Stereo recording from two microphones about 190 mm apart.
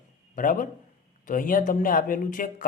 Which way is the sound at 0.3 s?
45° left (ahead or behind).